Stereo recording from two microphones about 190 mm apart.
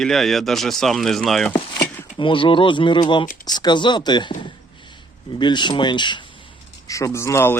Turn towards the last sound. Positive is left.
turn(degrees=15)  # may be behind; listen again after turning